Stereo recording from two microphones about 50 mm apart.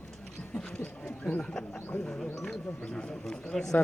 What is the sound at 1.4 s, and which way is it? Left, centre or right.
Speech, centre.